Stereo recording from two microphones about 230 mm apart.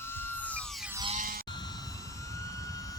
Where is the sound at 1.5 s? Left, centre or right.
Centre.